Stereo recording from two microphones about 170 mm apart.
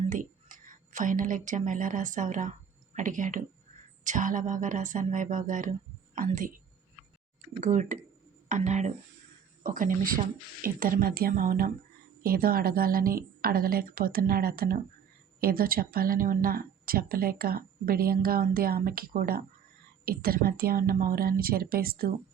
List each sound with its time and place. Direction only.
0.1 s speech: 50° right (ahead or behind)
7.6 s speech: 45° right (ahead or behind)
9.6 s speech: 55° right (ahead or behind)